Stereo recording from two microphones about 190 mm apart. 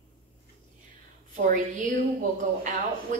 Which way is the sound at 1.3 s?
45° right (ahead or behind).